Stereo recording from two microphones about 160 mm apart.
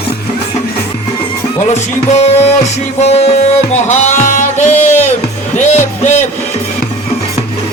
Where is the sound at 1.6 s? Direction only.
45° left (ahead or behind).